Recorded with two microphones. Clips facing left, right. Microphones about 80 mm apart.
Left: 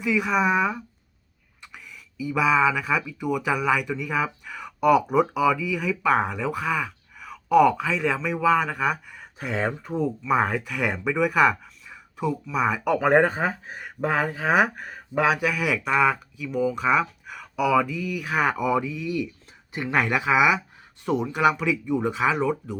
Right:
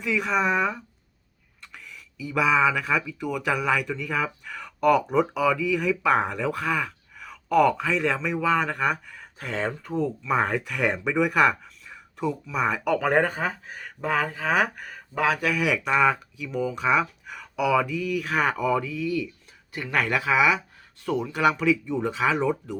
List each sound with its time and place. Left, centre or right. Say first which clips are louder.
0.0 s speech: left 2 dB; centre
13.0 s speech: left 6 dB; centre
14.8 s a sound: left 5 dB; left
15.2 s speech: left 2 dB; centre
15.4 s speech: even; centre; by 20.1 s left
20.1 s speech: left 1 dB; centre